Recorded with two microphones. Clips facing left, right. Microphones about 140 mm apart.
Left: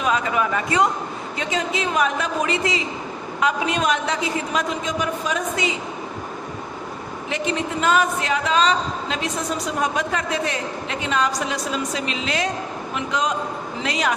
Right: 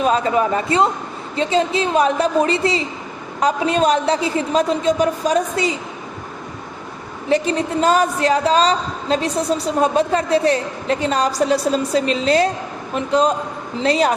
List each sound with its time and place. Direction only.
0.0 s a woman's voice: 35° right (ahead or behind)
7.3 s a woman's voice: 35° right (ahead or behind)